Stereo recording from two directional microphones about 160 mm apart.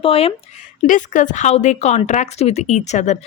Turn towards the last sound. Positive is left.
turn(degrees=45)  # may be behind; listen again after turning